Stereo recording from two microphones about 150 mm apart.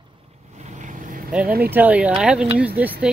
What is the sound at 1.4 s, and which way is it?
Speech, 90° right.